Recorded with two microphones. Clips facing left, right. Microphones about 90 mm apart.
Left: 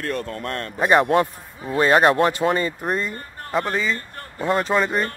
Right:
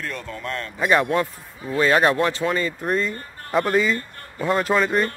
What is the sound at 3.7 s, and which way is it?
Speech, 5° right (ahead or behind).